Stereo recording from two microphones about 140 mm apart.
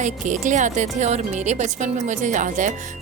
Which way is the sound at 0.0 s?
60° right (ahead or behind).